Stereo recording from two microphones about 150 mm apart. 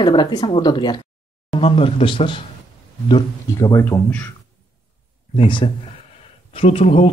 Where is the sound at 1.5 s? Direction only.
40° left (ahead or behind).